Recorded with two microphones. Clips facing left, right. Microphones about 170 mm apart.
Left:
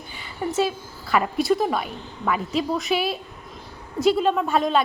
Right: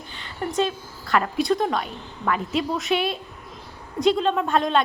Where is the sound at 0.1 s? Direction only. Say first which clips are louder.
Left 2 dB; 5° left (ahead or behind).